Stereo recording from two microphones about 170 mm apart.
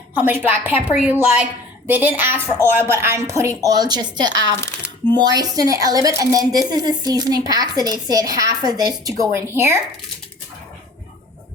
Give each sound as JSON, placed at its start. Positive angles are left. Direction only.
{"t": 0.2, "sound": "a woman's voice", "side_deg": -10}